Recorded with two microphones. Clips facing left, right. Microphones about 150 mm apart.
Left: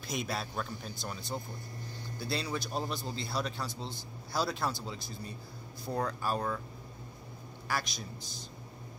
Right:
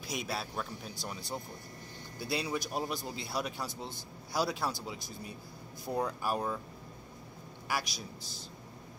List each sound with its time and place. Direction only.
0.0 s a man's voice: 5° right (ahead or behind)
7.6 s a man's voice: 10° right (ahead or behind)